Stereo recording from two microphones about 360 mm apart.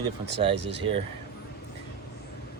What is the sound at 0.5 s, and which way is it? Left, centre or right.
Speech, right.